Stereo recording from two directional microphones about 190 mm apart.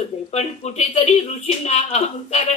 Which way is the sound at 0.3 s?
35° left (ahead or behind).